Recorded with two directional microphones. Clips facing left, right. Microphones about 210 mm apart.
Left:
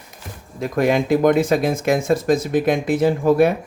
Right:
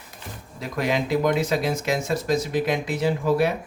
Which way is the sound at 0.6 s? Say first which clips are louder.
Left 7 dB; 50° left (ahead or behind).